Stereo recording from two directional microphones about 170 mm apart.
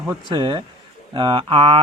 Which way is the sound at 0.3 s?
25° right (ahead or behind).